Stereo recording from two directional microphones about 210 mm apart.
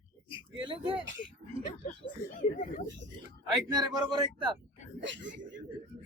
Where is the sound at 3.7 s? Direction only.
20° right (ahead or behind).